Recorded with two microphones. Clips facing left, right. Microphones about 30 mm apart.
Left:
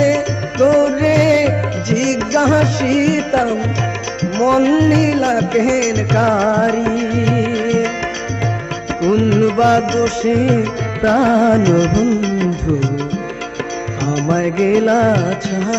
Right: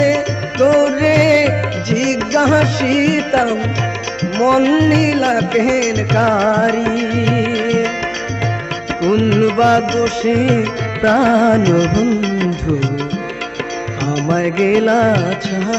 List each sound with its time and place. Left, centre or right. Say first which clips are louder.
0.6 s music: even; right
1.1 s music: right 1 dB; right
1.9 s music: even; right
2.4 s music: right 1 dB; right
5.6 s music: even; right
6.4 s music: right 1 dB; right
7.7 s music: even; right
9.0 s music: even; right
9.6 s music: even; right
10.2 s music: even; right
11.6 s music: even; right
12.0 s music: even; right
14.3 s music: right 1 dB; right